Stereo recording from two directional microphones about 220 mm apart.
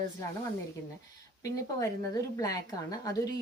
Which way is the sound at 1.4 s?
15° left (ahead or behind).